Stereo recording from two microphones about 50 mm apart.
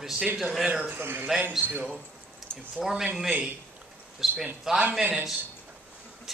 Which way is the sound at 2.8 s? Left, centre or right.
Centre.